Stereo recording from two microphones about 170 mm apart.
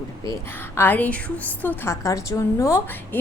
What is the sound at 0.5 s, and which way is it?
A woman's voice, 10° left (ahead or behind).